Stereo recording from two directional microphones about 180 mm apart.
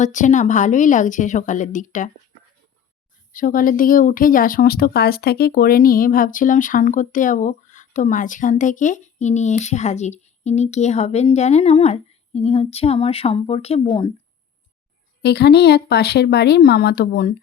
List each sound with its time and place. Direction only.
0.0 s speech: 45° left (ahead or behind)
3.3 s speech: 50° left (ahead or behind); by 14.1 s 30° left (ahead or behind)
15.2 s speech: 65° left (ahead or behind)